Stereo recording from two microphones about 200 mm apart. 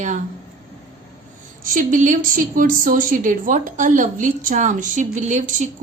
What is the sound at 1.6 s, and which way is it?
A woman's voice, 40° right (ahead or behind).